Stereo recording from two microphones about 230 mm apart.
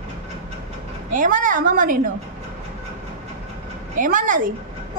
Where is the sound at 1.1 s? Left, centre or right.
Right.